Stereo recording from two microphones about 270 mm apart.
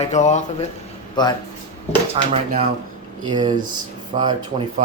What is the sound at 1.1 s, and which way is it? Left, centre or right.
Speech, centre.